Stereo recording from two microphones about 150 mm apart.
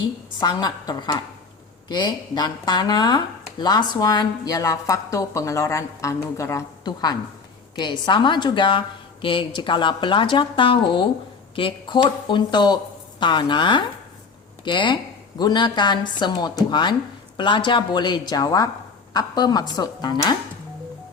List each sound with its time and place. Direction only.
0.3 s a woman's voice: 30° left (ahead or behind)